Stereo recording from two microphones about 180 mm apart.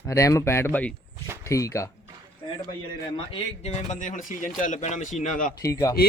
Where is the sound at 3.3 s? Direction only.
35° left (ahead or behind).